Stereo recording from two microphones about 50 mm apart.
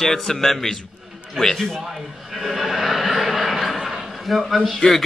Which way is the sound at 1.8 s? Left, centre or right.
Centre.